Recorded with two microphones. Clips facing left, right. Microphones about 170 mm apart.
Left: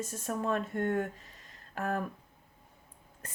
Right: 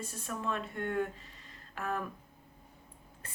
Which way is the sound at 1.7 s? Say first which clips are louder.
Left 3 dB; 45° left (ahead or behind).